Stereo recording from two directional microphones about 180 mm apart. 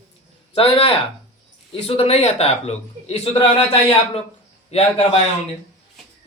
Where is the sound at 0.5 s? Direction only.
30° left (ahead or behind).